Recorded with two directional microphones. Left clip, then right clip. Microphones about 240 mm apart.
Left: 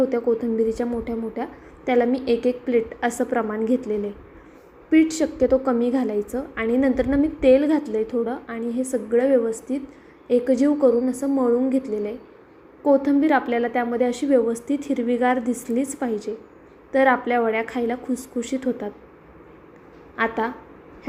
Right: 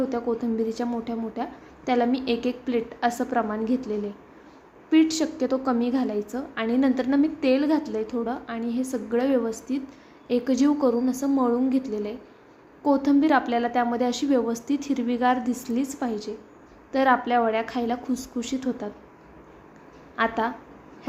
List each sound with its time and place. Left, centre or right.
0.0 s a woman's voice: centre
20.1 s a woman's voice: centre